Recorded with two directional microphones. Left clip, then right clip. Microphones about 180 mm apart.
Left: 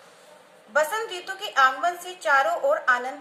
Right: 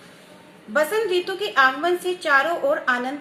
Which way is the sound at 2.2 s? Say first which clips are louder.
Right 1 dB; 35° right (ahead or behind).